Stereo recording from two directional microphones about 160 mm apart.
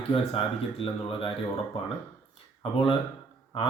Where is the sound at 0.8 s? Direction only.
35° left (ahead or behind).